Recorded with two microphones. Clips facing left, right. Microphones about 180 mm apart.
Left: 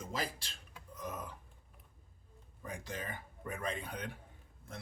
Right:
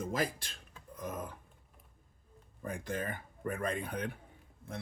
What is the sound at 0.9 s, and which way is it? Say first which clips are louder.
Burping: right 3 dB; 50° right (ahead or behind).